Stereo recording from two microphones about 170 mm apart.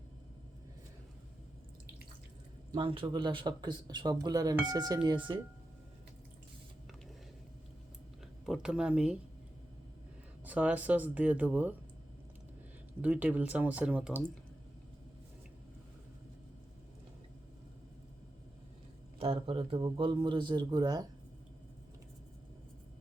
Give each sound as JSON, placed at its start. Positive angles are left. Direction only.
{"t": 2.7, "sound": "a man's voice", "side_deg": -30}
{"t": 8.4, "sound": "speech", "side_deg": -5}
{"t": 10.4, "sound": "speech", "side_deg": -10}
{"t": 13.0, "sound": "speech", "side_deg": -10}
{"t": 19.2, "sound": "a man's voice", "side_deg": -35}